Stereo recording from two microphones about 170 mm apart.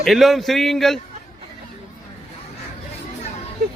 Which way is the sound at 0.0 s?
Centre (ahead or behind).